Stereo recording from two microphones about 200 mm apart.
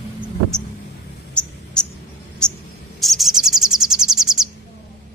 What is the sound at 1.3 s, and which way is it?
Mouse, 5° left (ahead or behind).